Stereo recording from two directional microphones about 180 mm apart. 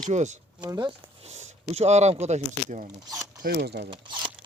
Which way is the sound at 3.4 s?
60° right (ahead or behind).